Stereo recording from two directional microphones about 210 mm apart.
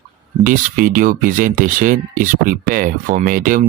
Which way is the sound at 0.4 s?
40° right (ahead or behind).